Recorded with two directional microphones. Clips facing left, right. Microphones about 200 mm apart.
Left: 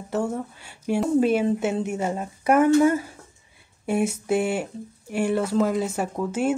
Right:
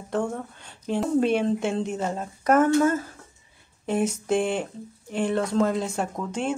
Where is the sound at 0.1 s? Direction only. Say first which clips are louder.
Left 1 dB; 5° left (ahead or behind).